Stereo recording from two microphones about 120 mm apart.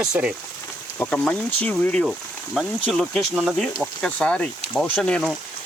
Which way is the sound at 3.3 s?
10° right (ahead or behind).